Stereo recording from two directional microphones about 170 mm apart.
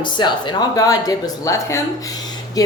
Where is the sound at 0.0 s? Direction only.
25° left (ahead or behind).